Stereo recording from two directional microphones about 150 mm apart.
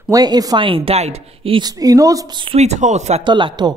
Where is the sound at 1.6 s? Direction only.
25° right (ahead or behind).